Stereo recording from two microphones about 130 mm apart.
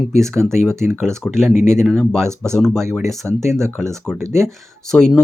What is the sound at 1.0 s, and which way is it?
Speech, 5° left (ahead or behind).